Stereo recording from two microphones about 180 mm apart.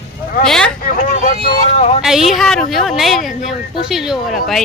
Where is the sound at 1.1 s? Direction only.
45° left (ahead or behind).